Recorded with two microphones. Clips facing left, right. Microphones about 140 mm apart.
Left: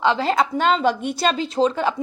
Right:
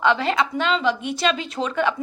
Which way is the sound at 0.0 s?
30° left (ahead or behind).